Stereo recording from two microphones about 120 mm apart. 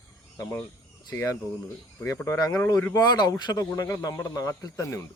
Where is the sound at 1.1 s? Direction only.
25° left (ahead or behind).